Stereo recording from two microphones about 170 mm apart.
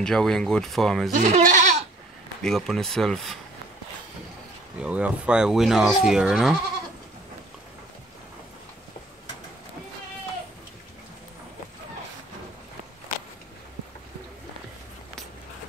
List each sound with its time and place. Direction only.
0.0 s speech: 5° left (ahead or behind)
1.1 s speech: 50° right (ahead or behind)
2.4 s speech: centre (ahead or behind)
4.7 s speech: 5° right (ahead or behind)